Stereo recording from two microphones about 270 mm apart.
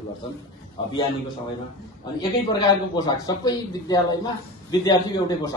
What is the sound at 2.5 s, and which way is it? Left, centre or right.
Speech, centre.